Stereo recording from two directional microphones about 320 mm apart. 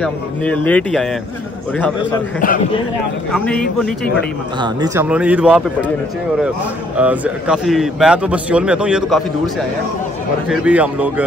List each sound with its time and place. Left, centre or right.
0.0 s a man's voice: centre
2.4 s a man's voice: left
3.3 s a man's voice: centre
4.6 s a man's voice: centre
7.0 s a man's voice: centre